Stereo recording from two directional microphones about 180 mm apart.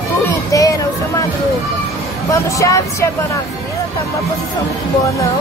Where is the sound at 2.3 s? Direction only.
20° left (ahead or behind).